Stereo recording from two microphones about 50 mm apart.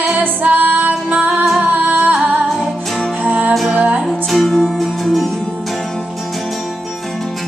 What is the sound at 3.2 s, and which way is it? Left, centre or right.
Music, right.